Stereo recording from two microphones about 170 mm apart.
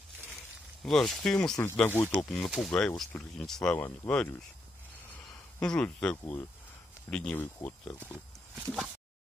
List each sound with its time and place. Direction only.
0.8 s speech: centre (ahead or behind)
5.6 s speech: 5° left (ahead or behind)
8.5 s speech: centre (ahead or behind)